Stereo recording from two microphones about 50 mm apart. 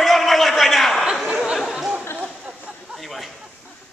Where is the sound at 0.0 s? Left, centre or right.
Centre.